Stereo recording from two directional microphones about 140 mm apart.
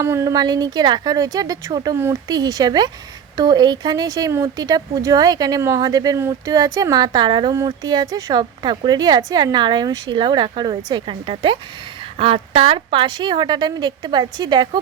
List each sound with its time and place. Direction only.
0.0 s speech: 20° right (ahead or behind)